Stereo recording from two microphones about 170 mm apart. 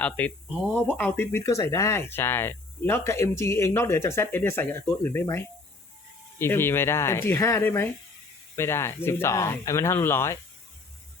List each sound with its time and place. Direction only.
0.0 s speech: 10° left (ahead or behind)
6.4 s speech: 15° left (ahead or behind)